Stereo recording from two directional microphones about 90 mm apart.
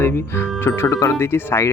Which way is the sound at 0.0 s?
25° left (ahead or behind).